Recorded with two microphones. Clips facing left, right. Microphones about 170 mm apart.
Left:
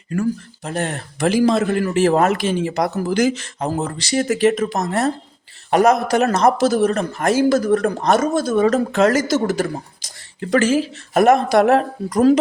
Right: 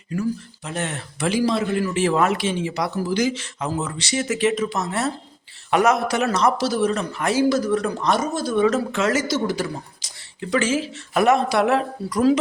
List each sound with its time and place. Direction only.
0.1 s speech: 45° left (ahead or behind)
4.0 s speech: 40° left (ahead or behind)